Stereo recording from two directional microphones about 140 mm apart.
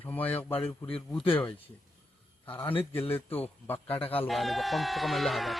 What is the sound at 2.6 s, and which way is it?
Speech, 40° left (ahead or behind).